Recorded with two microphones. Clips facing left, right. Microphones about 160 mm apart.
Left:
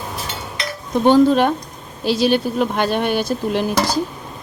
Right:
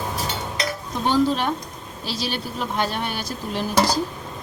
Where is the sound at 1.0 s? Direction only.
55° left (ahead or behind).